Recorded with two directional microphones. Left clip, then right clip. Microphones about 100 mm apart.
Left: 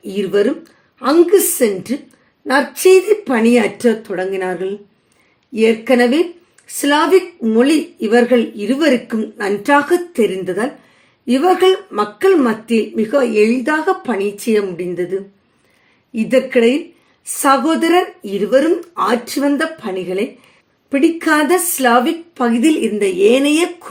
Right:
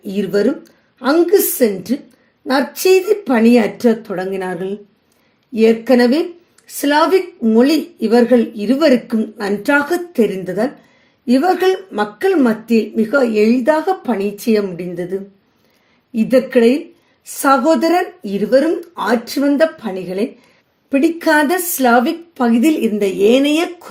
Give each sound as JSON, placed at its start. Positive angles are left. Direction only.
{"t": 0.0, "sound": "a woman's voice", "side_deg": -30}
{"t": 16.1, "sound": "a woman's voice", "side_deg": -30}